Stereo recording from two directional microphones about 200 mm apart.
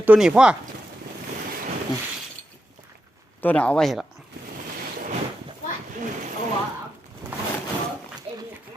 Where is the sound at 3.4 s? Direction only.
5° left (ahead or behind).